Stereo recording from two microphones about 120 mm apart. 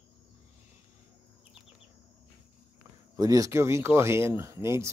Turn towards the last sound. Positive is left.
turn(degrees=-25)  # may be behind; listen again after turning